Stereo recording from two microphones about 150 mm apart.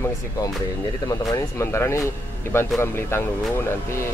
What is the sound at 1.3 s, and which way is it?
Speech, 20° left (ahead or behind).